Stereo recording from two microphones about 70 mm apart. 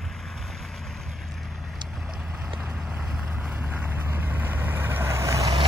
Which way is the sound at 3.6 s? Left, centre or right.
Right.